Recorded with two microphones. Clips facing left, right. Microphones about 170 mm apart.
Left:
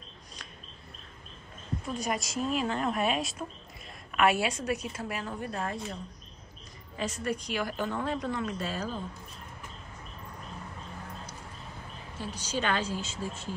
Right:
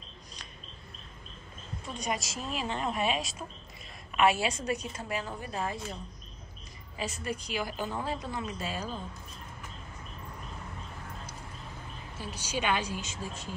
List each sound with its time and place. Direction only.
2.0 s speech: centre (ahead or behind)
7.0 s speech: 5° right (ahead or behind)
12.4 s speech: 10° right (ahead or behind)